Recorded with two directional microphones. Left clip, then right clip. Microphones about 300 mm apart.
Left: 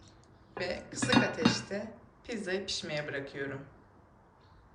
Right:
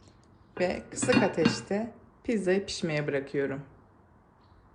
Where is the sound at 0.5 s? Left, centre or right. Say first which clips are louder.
Right 6 dB; centre.